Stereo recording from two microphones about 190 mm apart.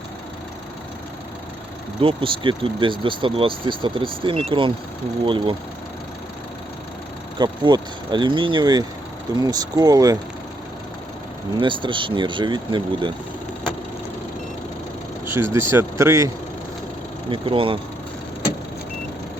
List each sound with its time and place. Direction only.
2.0 s speech: 25° right (ahead or behind)
7.3 s speech: 25° right (ahead or behind)
11.5 s speech: 25° right (ahead or behind)
15.3 s speech: 10° right (ahead or behind)
17.2 s speech: 25° right (ahead or behind)